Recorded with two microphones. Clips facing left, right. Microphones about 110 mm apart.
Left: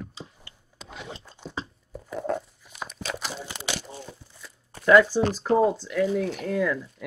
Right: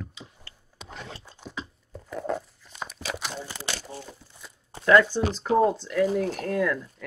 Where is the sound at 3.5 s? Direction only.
15° left (ahead or behind).